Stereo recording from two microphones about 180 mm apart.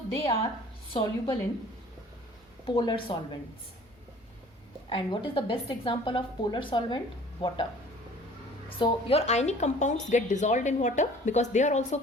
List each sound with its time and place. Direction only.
0.9 s a woman's voice: 30° left (ahead or behind)
2.6 s a woman's voice: 25° left (ahead or behind)
4.9 s a woman's voice: 30° left (ahead or behind)
8.8 s a woman's voice: 35° left (ahead or behind)